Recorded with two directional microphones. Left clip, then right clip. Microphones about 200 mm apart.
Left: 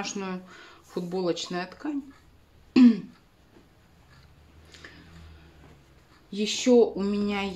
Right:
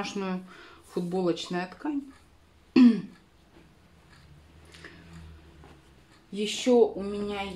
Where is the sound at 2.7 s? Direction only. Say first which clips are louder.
Left 1 dB; centre (ahead or behind).